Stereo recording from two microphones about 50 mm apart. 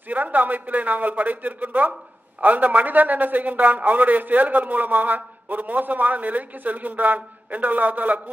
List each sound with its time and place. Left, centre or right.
0.1 s a man's voice: right